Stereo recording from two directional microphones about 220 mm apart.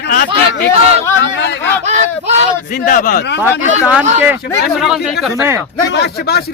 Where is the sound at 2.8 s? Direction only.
35° left (ahead or behind).